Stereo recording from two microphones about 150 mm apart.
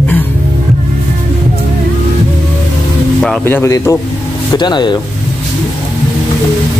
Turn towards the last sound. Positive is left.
turn(degrees=30)  # may be behind; listen again after turning